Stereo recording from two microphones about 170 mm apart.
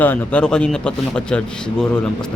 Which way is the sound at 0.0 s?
10° left (ahead or behind).